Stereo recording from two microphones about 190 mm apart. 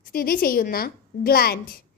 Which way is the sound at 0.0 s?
50° left (ahead or behind).